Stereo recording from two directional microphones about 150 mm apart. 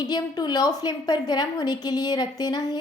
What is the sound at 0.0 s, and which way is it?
A woman's voice, 30° left (ahead or behind).